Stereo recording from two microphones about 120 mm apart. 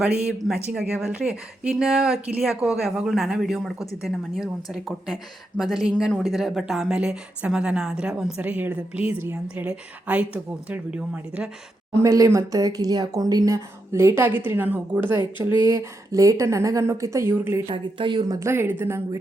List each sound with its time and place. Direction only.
0.3 s speech: 5° right (ahead or behind)
11.9 s speech: 25° right (ahead or behind)
17.7 s speech: 45° right (ahead or behind); by 19.2 s 20° right (ahead or behind)